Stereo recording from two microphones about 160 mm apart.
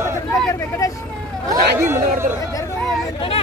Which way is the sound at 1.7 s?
15° right (ahead or behind).